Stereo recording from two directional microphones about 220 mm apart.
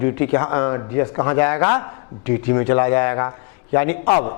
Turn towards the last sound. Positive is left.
turn(degrees=15)  # may be behind; listen again after turning